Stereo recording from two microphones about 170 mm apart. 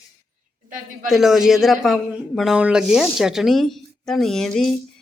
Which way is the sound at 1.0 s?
Centre (ahead or behind).